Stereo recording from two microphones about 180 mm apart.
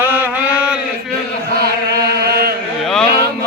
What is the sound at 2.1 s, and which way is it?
Chant, 65° right (ahead or behind).